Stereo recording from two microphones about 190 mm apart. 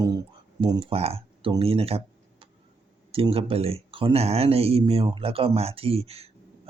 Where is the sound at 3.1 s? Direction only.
30° right (ahead or behind).